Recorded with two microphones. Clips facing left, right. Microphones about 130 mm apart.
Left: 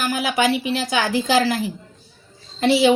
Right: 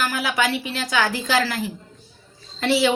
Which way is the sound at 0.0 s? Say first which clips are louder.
Left 3 dB; 20° left (ahead or behind).